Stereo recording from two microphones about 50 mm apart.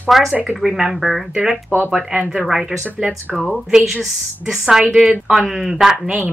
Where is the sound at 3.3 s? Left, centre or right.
Centre.